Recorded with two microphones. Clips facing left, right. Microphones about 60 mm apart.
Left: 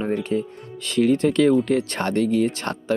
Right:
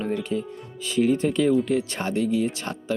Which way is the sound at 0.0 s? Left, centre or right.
Left.